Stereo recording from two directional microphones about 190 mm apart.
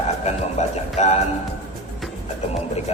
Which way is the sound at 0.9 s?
35° left (ahead or behind).